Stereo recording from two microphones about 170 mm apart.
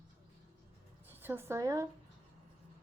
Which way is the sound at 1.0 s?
15° right (ahead or behind).